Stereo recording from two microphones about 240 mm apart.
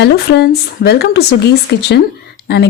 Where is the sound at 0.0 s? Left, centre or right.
Left.